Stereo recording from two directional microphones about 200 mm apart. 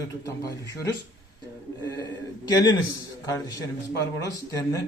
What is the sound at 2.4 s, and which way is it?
A man's voice, 20° left (ahead or behind).